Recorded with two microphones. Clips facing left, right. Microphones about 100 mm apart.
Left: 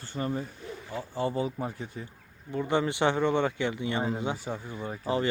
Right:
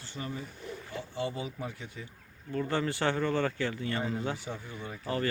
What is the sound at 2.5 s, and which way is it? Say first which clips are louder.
Speech: left 3 dB; 20° left (ahead or behind).